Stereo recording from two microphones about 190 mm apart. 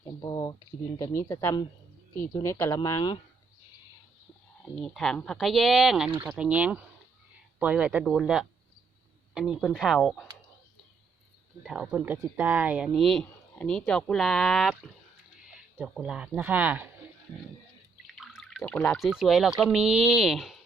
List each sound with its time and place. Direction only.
0.2 s a sound: 20° left (ahead or behind)
0.9 s speech: 15° left (ahead or behind)
4.6 s speech: centre (ahead or behind)
11.6 s speech: centre (ahead or behind)
18.0 s speech: centre (ahead or behind)